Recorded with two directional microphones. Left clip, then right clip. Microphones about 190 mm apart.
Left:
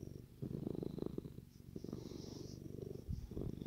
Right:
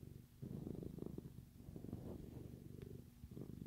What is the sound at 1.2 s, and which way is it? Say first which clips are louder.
Purr: left 7 dB; 20° left (ahead or behind).